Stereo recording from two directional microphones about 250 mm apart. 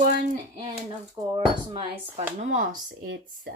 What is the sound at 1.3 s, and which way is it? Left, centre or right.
Speech, right.